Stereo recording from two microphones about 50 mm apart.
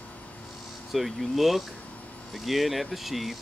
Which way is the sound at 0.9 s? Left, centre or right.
Centre.